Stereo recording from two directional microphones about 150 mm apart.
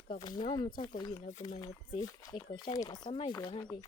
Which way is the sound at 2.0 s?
35° left (ahead or behind).